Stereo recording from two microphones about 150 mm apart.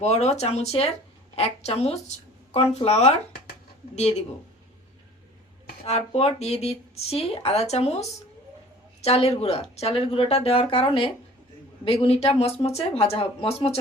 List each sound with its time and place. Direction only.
0.0 s speech: 45° left (ahead or behind)
5.8 s speech: 40° left (ahead or behind)
9.0 s speech: 45° left (ahead or behind)